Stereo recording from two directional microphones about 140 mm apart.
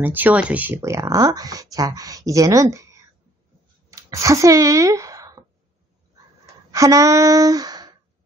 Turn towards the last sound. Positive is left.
turn(degrees=-30)  # may be behind; listen again after turning